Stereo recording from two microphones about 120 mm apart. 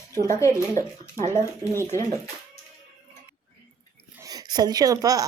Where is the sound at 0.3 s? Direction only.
25° left (ahead or behind).